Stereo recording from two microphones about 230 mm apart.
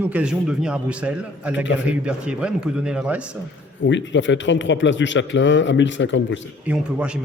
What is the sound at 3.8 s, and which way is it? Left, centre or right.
Speech, left.